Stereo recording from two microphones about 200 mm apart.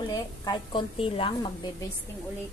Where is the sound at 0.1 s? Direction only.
20° left (ahead or behind).